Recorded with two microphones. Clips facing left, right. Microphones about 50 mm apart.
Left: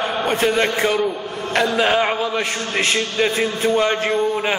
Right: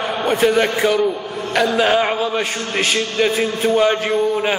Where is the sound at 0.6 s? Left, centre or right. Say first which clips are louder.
Right 2 dB; centre.